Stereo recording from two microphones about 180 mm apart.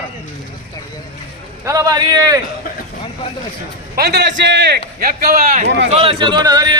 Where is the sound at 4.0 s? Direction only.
65° right (ahead or behind).